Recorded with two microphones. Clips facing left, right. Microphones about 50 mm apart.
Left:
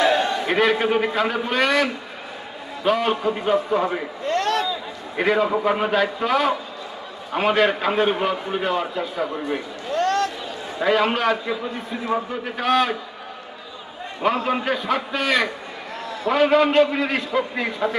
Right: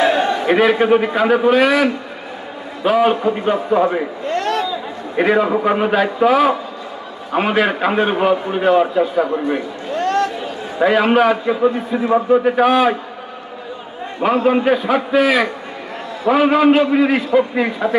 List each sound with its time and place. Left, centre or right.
0.0 s a sound: right
0.5 s a man's voice: centre
4.3 s a sound: right
4.6 s a man's voice: centre
10.1 s chatter: right
10.8 s a man's voice: centre
12.6 s a man's voice: centre
14.4 s a man's voice: centre